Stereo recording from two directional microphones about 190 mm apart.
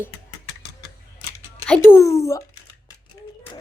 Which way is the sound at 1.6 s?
10° left (ahead or behind).